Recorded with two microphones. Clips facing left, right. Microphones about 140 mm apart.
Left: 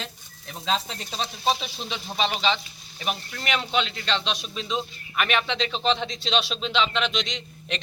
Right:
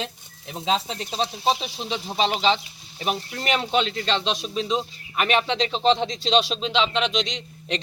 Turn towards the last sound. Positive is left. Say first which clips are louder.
# right 3 dB
turn(degrees=-35)  # may be behind; listen again after turning